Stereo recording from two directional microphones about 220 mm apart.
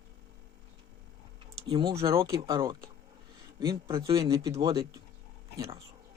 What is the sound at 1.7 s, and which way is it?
Speech, 15° right (ahead or behind).